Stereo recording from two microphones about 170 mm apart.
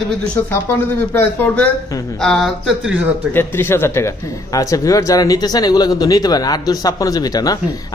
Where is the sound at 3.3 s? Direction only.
15° left (ahead or behind).